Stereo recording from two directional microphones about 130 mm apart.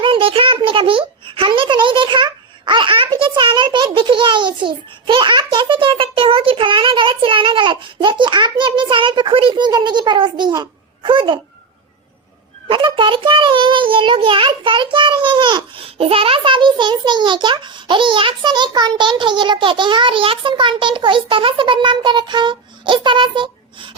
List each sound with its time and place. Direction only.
0.0 s a sound: 40° right (ahead or behind)
3.2 s a child's voice: 40° right (ahead or behind)
12.6 s a child's voice: 40° right (ahead or behind)